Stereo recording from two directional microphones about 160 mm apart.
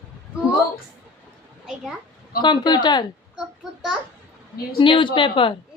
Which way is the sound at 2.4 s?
30° left (ahead or behind).